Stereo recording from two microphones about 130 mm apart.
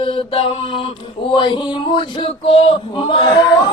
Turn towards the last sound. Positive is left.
turn(degrees=35)  # may be behind; listen again after turning